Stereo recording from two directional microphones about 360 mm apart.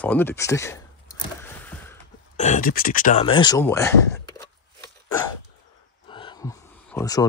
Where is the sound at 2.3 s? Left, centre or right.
Centre.